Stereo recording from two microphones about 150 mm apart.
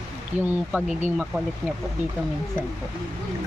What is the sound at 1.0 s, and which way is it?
Speech, 10° right (ahead or behind).